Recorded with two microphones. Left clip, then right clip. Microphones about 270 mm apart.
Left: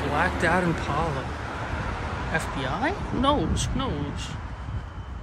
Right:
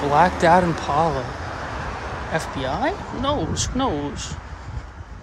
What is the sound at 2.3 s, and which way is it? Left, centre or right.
Speech, centre.